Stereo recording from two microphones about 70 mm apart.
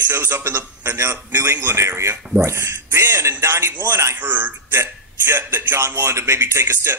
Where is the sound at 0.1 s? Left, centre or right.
Right.